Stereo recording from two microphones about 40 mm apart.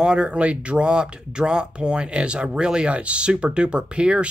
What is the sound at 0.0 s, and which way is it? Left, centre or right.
Speech, right.